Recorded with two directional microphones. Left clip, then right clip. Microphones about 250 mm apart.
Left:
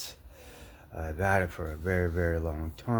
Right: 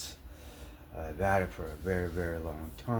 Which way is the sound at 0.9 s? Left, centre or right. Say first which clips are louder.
Left 2 dB; left.